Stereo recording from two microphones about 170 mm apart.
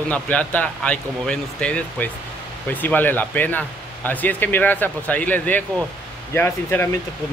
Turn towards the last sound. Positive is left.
turn(degrees=10)  # may be behind; listen again after turning